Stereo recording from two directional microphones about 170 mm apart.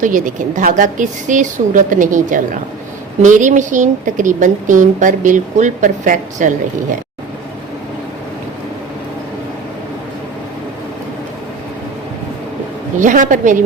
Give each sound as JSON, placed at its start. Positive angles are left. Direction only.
{"t": 0.0, "sound": "a woman's voice", "side_deg": -50}
{"t": 13.0, "sound": "a woman's voice", "side_deg": -50}